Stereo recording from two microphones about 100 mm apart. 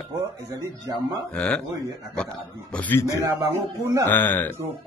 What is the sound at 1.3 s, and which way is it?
Speech, 10° left (ahead or behind).